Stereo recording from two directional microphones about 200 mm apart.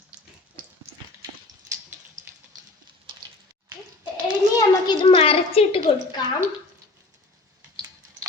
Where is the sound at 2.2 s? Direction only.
40° right (ahead or behind).